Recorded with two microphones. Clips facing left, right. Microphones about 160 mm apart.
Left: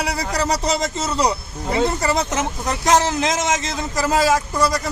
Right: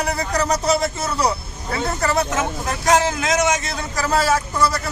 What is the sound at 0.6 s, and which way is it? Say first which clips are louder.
A man's voice: right 2 dB; 15° left (ahead or behind).